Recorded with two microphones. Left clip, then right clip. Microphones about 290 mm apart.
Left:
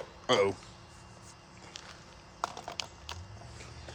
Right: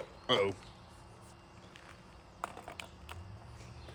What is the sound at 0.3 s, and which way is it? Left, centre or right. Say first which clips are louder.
Speech: left 4 dB; centre.